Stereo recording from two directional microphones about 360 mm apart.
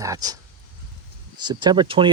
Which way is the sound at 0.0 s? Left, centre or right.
Centre.